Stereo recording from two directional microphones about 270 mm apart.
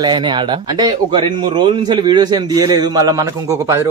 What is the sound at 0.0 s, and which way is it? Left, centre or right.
A man's voice, centre.